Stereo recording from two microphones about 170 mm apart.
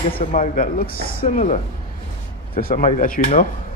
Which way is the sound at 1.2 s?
40° left (ahead or behind).